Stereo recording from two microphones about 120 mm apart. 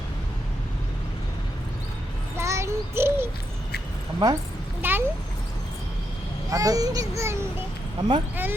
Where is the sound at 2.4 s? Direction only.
25° right (ahead or behind).